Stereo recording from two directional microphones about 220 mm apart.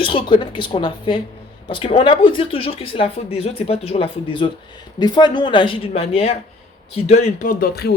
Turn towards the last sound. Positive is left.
turn(degrees=45)  # may be behind; listen again after turning